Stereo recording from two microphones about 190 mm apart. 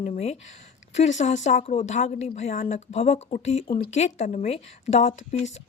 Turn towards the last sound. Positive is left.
turn(degrees=35)  # may be behind; listen again after turning